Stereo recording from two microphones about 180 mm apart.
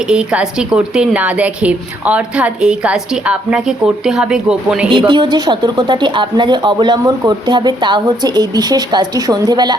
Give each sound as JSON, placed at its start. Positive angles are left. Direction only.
{"t": 0.1, "sound": "a woman's voice", "side_deg": -5}
{"t": 4.9, "sound": "a woman's voice", "side_deg": -25}